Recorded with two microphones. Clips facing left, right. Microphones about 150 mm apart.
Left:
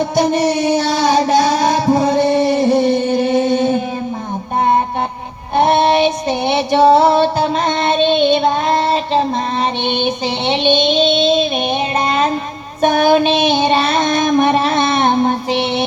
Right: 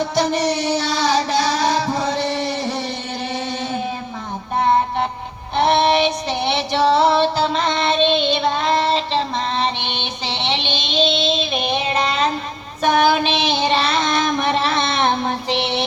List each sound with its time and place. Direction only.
0.2 s music: 50° left (ahead or behind)
5.5 s child singing: 50° left (ahead or behind)
6.5 s female singing: 50° left (ahead or behind)
10.0 s child singing: 50° left (ahead or behind)
11.9 s music: 50° left (ahead or behind)
12.8 s child singing: 50° left (ahead or behind)